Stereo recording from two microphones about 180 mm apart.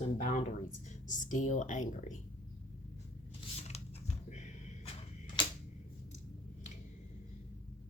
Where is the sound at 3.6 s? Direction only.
35° left (ahead or behind).